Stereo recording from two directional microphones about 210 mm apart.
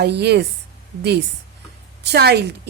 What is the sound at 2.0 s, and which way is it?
Speech, 50° right (ahead or behind).